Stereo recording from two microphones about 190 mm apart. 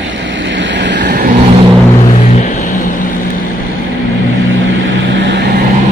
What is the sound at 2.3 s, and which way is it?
Music, 40° left (ahead or behind).